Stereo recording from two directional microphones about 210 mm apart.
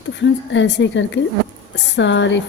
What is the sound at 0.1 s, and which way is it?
A woman's voice, 60° left (ahead or behind).